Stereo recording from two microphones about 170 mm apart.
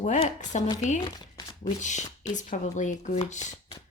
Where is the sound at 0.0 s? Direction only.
45° left (ahead or behind).